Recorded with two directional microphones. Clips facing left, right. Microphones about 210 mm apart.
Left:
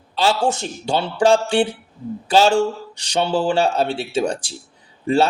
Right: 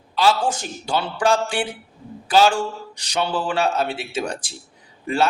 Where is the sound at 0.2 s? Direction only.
25° left (ahead or behind).